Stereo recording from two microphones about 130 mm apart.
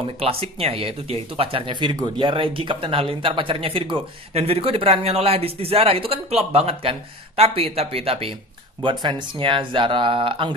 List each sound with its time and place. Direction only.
0.0 s speech: 45° right (ahead or behind)